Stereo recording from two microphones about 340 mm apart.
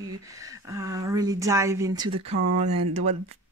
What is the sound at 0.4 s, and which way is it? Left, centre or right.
Speech, centre.